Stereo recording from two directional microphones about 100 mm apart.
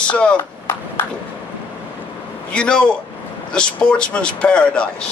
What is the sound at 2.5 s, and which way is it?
Speech, 10° left (ahead or behind).